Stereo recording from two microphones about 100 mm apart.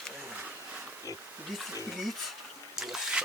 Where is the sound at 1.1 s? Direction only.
35° left (ahead or behind).